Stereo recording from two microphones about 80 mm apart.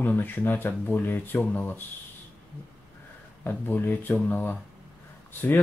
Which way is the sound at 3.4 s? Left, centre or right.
Left.